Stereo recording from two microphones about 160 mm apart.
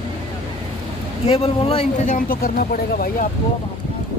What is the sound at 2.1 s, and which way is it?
Speech, 60° left (ahead or behind).